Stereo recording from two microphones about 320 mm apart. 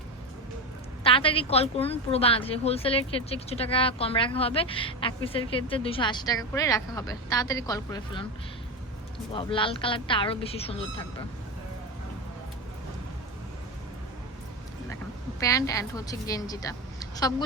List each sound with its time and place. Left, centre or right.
1.0 s a woman's voice: centre
9.3 s a woman's voice: centre
15.4 s a woman's voice: centre